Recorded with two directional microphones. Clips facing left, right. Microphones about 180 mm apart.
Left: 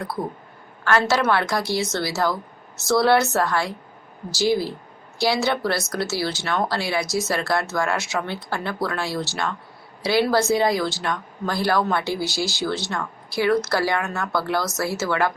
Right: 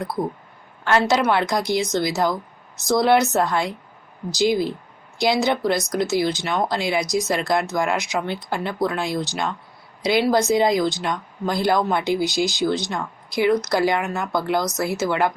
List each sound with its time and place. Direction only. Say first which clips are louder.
0.9 s speech: right 1 dB; 20° right (ahead or behind)